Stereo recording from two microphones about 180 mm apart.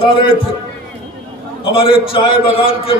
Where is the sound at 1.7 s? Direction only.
30° left (ahead or behind).